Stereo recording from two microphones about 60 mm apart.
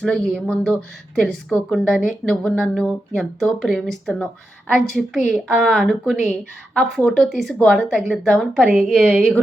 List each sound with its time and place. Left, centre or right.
0.0 s speech: centre
7.8 s speech: centre